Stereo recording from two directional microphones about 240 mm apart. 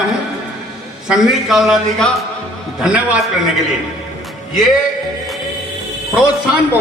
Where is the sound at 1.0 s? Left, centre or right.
Centre.